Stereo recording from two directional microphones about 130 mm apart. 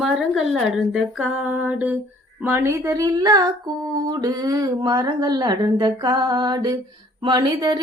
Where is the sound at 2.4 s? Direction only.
20° right (ahead or behind).